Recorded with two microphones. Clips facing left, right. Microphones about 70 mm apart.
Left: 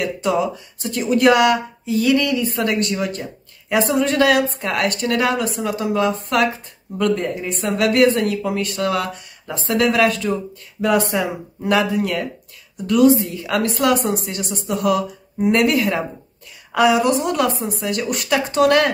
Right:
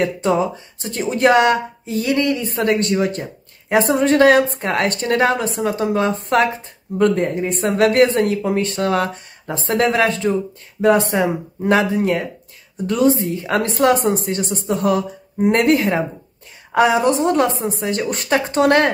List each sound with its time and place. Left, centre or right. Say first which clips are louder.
0.0 s speech: right 2 dB; right